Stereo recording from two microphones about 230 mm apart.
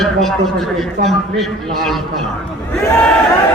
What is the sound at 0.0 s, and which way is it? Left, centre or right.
A man's voice, centre.